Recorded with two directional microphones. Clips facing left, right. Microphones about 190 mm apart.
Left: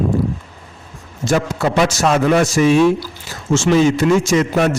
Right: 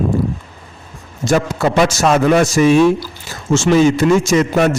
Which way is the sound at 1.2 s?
45° right (ahead or behind).